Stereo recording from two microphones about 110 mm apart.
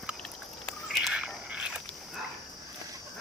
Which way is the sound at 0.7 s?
Centre (ahead or behind).